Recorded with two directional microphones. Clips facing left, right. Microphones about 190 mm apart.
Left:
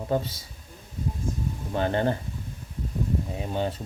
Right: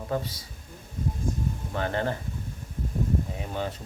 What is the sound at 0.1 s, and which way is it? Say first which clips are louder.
Speech: left 3 dB; 25° left (ahead or behind).